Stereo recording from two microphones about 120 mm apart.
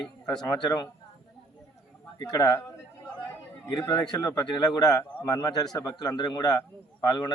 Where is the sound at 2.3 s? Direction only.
30° left (ahead or behind).